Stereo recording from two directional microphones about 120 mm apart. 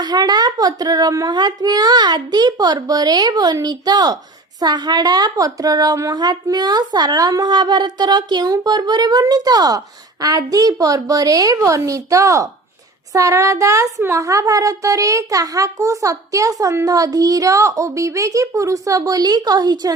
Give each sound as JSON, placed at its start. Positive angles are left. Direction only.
{"t": 0.0, "sound": "a woman's voice", "side_deg": -35}